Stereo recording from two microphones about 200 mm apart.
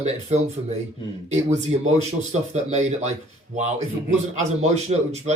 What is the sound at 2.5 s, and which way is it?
A man's voice, 35° right (ahead or behind).